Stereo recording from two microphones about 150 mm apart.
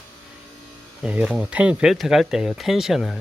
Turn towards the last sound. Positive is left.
turn(degrees=0)  # may be behind; listen again after turning